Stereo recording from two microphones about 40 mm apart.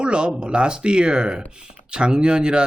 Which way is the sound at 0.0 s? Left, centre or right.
Right.